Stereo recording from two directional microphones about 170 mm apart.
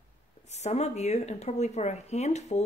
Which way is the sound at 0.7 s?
40° left (ahead or behind).